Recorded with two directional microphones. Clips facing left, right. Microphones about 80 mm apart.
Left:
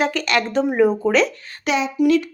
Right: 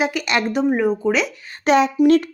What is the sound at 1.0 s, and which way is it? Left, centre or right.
Speech, centre.